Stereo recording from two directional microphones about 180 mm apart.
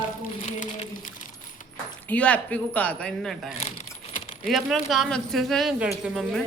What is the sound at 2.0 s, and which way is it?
Speech, 10° left (ahead or behind).